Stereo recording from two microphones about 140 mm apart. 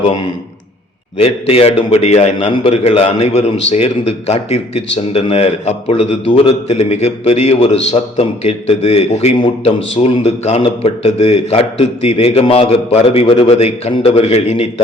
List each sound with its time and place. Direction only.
1.2 s a man's voice: 45° left (ahead or behind)